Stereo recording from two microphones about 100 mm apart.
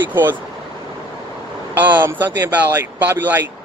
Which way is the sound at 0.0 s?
20° right (ahead or behind).